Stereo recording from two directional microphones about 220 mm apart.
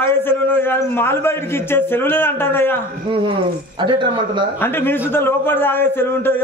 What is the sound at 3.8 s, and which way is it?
Speech, 20° right (ahead or behind).